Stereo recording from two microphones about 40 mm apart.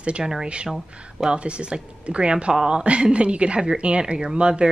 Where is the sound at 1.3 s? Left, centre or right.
Right.